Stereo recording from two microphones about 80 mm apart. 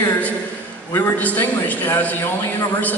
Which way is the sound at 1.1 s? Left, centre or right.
Left.